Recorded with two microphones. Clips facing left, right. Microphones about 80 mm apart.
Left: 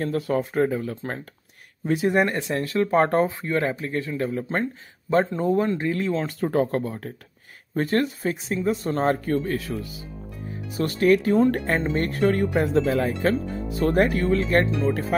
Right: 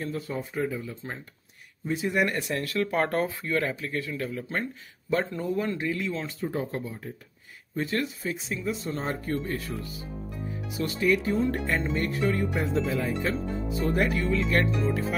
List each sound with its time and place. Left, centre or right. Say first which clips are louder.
0.0 s speech: left 8 dB; left
2.1 s speech: left 4 dB; left
5.1 s speech: left 6 dB; left
5.4 s speech: left 6 dB; left
6.4 s speech: left 9 dB; left
7.7 s speech: left 6 dB; left
9.2 s speech: left 6 dB; left
10.8 s speech: left 6 dB; left
11.2 s speech: left 6 dB; left
13.9 s speech: left 6 dB; left